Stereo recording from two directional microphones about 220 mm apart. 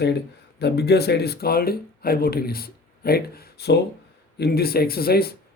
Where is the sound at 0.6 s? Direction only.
50° left (ahead or behind).